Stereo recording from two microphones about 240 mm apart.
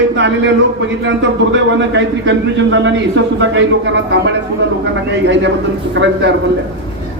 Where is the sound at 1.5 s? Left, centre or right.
Right.